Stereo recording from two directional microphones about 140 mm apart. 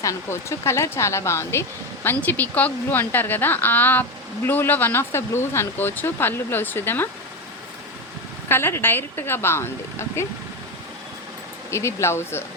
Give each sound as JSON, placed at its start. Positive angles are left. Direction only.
{"t": 0.0, "sound": "speech", "side_deg": 20}
{"t": 8.4, "sound": "speech", "side_deg": 15}
{"t": 11.7, "sound": "speech", "side_deg": 20}